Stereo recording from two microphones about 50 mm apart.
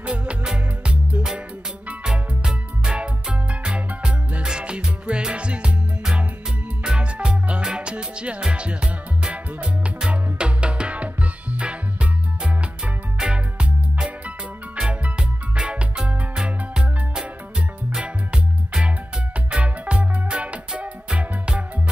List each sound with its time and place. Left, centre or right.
0.0 s music: right
2.0 s music: centre
6.8 s music: centre